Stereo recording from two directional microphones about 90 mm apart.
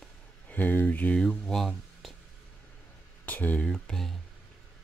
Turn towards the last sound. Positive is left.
turn(degrees=5)  # may be behind; listen again after turning